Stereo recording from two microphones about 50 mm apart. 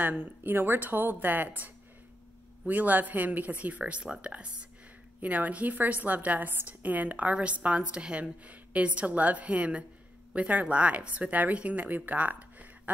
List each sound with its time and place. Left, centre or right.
0.0 s speech: right
5.2 s a woman's voice: right